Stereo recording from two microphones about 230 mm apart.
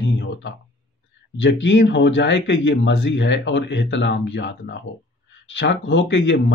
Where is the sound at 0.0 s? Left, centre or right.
Left.